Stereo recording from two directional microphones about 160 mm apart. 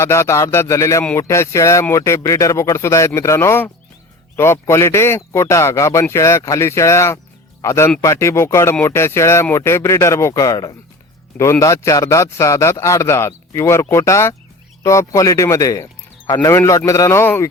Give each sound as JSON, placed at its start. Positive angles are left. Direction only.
{"t": 0.0, "sound": "speech", "side_deg": 15}